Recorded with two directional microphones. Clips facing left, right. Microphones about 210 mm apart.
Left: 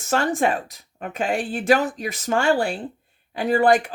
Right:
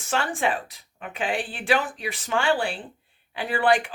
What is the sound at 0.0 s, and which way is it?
Speech, 40° left (ahead or behind).